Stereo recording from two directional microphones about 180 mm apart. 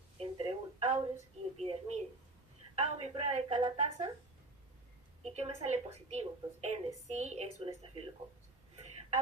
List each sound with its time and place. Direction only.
0.2 s a sound: 30° right (ahead or behind)
2.7 s a woman's voice: 35° right (ahead or behind)
5.2 s a woman's voice: 35° right (ahead or behind)
8.7 s whispering: 35° right (ahead or behind)